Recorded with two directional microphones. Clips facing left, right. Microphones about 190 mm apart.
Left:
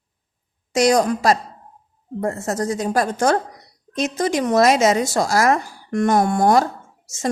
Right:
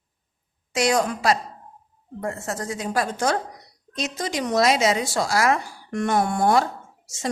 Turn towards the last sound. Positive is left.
turn(degrees=45)  # may be behind; listen again after turning